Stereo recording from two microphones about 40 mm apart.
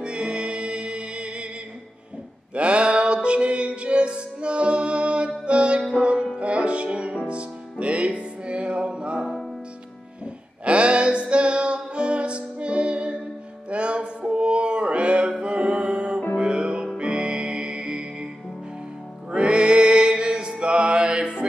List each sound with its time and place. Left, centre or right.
0.0 s music: right
2.5 s music: right
13.7 s mantra: right
15.4 s music: right
19.3 s music: right